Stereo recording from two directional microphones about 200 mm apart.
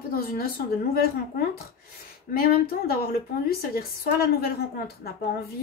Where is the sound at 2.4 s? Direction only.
50° left (ahead or behind).